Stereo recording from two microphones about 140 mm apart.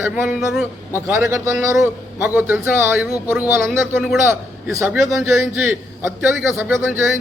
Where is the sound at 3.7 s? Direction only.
Centre (ahead or behind).